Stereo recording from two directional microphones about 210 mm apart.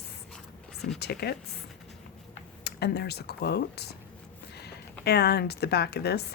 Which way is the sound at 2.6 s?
50° left (ahead or behind).